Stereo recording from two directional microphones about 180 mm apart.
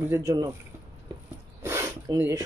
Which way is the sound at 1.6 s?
15° right (ahead or behind).